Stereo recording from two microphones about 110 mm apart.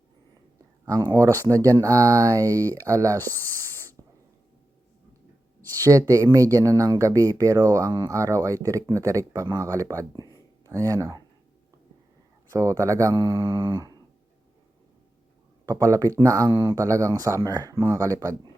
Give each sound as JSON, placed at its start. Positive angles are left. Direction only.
{"t": 0.9, "sound": "speech", "side_deg": -35}
{"t": 5.7, "sound": "speech", "side_deg": -30}
{"t": 12.5, "sound": "speech", "side_deg": -30}
{"t": 15.6, "sound": "speech", "side_deg": -30}